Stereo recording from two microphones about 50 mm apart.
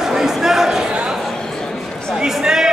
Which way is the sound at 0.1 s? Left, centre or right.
Centre.